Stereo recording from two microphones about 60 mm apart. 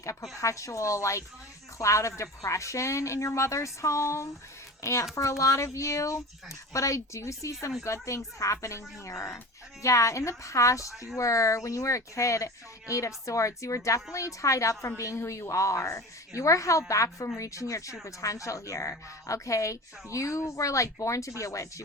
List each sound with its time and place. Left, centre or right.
0.0 s a woman's voice: left